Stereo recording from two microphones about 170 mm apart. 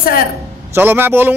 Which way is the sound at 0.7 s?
15° right (ahead or behind).